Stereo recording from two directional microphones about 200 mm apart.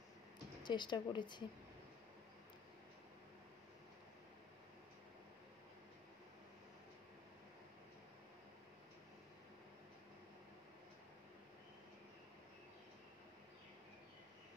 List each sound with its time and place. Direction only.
0.7 s a woman's voice: 20° left (ahead or behind)